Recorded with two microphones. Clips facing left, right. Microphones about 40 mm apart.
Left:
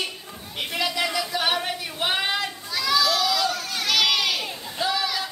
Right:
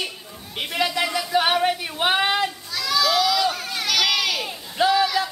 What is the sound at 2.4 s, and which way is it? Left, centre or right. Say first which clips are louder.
Children playing: even; centre.